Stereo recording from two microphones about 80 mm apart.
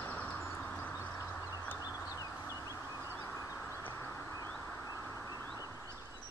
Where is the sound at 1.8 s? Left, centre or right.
Left.